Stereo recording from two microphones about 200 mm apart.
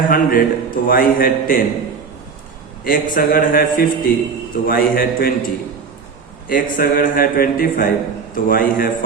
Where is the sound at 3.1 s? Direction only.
45° left (ahead or behind).